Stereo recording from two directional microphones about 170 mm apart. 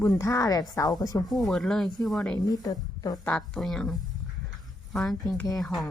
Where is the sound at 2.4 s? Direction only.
20° left (ahead or behind).